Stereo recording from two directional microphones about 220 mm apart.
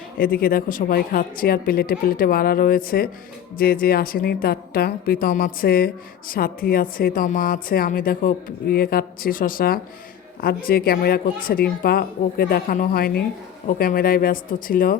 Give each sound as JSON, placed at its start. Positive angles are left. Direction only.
{"t": 0.2, "sound": "speech", "side_deg": 40}